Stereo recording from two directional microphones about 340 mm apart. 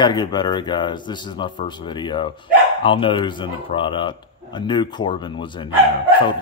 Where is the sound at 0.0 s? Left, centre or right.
Centre.